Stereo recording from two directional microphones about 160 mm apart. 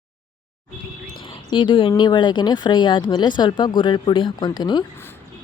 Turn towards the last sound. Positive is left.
turn(degrees=25)  # may be behind; listen again after turning